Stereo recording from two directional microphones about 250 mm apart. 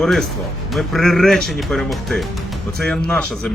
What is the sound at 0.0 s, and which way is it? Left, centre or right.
Speech, centre.